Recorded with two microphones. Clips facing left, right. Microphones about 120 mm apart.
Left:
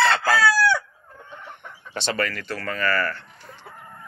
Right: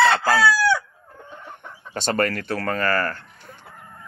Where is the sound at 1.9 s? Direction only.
45° right (ahead or behind).